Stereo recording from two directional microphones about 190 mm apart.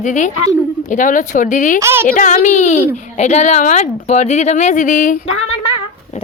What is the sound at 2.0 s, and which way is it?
Speech, 45° left (ahead or behind).